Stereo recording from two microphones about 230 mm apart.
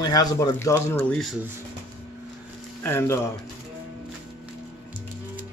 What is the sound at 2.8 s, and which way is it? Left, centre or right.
Speech, centre.